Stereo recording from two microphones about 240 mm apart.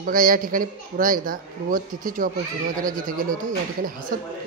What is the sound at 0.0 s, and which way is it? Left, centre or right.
A man's voice, right.